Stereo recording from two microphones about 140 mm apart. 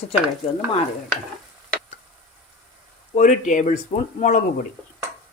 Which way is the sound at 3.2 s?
65° left (ahead or behind).